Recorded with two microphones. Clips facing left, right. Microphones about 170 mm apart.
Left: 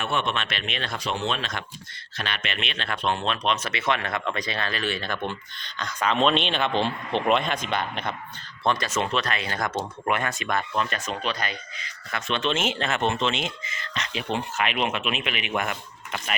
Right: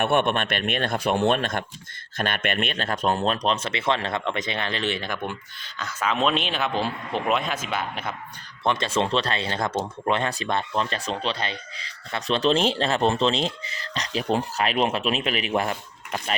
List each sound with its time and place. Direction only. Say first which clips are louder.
0.0 s speech: right 6 dB; 55° right (ahead or behind); by 8.1 s 5° right (ahead or behind)
8.6 s speech: right 2 dB; 20° right (ahead or behind)